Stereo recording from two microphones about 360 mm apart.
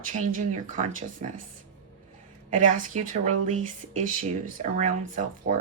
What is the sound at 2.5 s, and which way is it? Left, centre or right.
A woman's voice, right.